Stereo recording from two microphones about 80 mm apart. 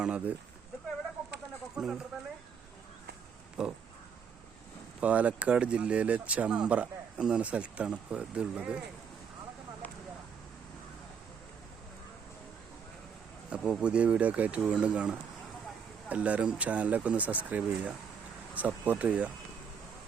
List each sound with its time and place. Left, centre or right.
0.0 s speech: centre
1.7 s speech: centre
3.6 s speech: centre
4.9 s speech: centre
13.5 s speech: centre